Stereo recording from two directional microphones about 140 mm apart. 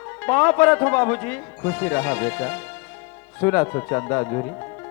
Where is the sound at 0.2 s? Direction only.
15° left (ahead or behind).